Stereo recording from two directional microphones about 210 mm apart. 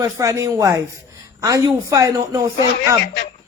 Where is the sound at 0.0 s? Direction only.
15° right (ahead or behind).